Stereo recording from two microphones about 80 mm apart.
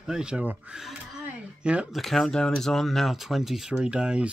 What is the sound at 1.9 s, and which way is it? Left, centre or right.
Speech, centre.